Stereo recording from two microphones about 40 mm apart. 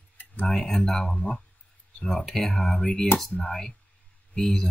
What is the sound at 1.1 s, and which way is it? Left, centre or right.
Speech, left.